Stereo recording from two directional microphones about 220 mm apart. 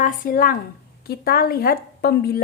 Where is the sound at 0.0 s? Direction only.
40° left (ahead or behind).